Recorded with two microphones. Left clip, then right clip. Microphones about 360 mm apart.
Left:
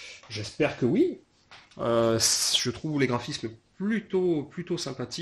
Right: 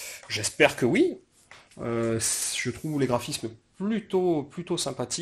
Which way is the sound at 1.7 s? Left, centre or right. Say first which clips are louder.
Left 5 dB; centre.